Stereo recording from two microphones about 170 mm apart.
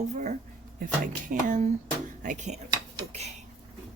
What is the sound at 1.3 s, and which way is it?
Speech, 50° right (ahead or behind).